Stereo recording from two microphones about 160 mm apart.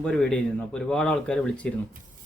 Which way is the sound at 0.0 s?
5° left (ahead or behind).